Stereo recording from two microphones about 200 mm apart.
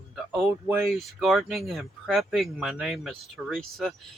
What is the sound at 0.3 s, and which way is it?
Speech, 5° right (ahead or behind).